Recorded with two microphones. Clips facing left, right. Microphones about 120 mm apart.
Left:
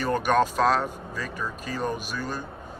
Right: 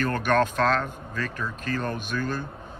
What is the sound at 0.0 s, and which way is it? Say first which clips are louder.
Speech: even; 10° left (ahead or behind).